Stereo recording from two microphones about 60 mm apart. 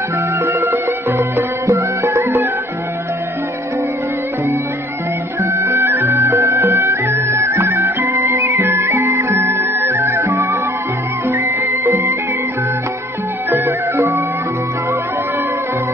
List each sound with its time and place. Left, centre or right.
0.4 s music: right
1.7 s music: right
5.4 s music: right
13.7 s music: right